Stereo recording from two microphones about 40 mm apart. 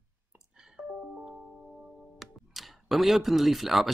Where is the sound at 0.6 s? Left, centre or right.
Centre.